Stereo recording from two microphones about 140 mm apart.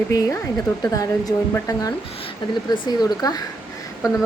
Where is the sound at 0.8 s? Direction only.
25° left (ahead or behind).